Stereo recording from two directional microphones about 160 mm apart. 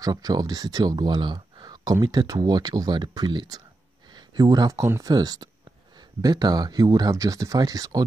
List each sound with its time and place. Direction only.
0.0 s speech: 25° right (ahead or behind)